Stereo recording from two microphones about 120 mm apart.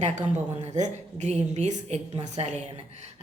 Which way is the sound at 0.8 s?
75° right (ahead or behind).